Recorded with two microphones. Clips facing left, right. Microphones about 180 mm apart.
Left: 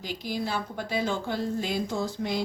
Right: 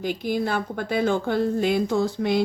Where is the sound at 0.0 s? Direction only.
55° right (ahead or behind).